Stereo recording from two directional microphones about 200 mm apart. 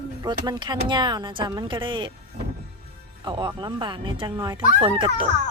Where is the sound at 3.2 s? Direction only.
25° right (ahead or behind).